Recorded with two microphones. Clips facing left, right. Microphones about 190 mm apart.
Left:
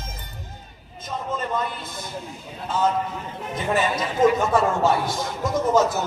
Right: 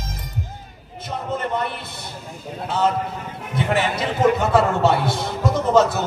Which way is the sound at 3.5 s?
70° right (ahead or behind).